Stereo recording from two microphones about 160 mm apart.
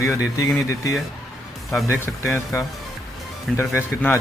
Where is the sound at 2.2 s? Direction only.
15° left (ahead or behind).